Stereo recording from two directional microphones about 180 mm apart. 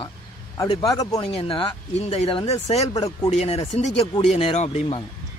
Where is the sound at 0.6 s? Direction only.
20° left (ahead or behind).